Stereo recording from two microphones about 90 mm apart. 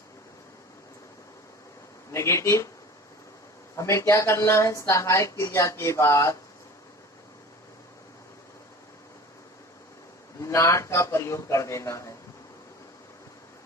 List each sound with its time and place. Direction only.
2.1 s speech: 30° left (ahead or behind)
3.8 s speech: 30° left (ahead or behind)
10.4 s speech: 35° left (ahead or behind)